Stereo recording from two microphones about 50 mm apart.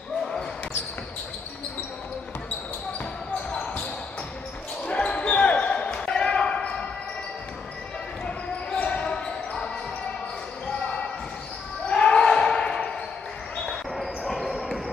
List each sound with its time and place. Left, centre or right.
4.8 s basketball bounce: left
8.7 s basketball bounce: left
11.9 s basketball bounce: centre
13.9 s basketball bounce: centre